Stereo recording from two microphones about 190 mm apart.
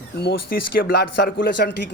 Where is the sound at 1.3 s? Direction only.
65° left (ahead or behind).